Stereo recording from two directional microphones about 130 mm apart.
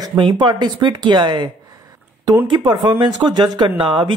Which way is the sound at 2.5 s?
35° right (ahead or behind).